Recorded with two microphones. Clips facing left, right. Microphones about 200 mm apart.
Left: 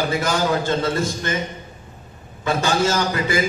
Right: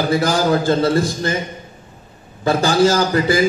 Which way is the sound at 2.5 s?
35° right (ahead or behind).